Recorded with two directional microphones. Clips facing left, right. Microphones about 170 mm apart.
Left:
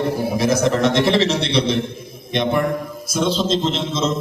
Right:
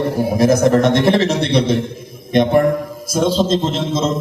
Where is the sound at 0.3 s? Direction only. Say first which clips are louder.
Right 6 dB; 50° right (ahead or behind).